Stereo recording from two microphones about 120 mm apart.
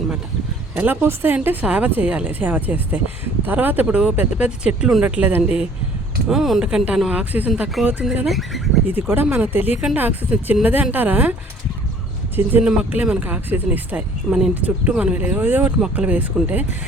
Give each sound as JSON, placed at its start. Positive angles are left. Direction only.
{"t": 0.8, "sound": "speech", "side_deg": -15}
{"t": 8.3, "sound": "speech", "side_deg": 0}
{"t": 8.9, "sound": "speech", "side_deg": -15}
{"t": 12.5, "sound": "speech", "side_deg": -15}